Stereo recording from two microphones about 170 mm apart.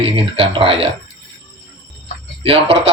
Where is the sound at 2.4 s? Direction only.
35° right (ahead or behind).